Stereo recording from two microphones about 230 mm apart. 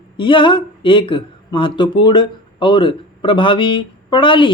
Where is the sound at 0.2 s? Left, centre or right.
Left.